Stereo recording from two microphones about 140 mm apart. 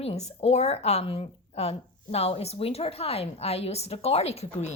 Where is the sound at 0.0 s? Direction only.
50° left (ahead or behind).